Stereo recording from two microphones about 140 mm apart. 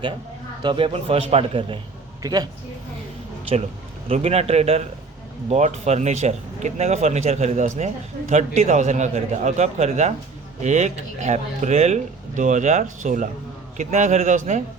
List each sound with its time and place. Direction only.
0.6 s a man's voice: 35° right (ahead or behind)
2.2 s speech: 25° right (ahead or behind)
4.1 s speech: 45° right (ahead or behind)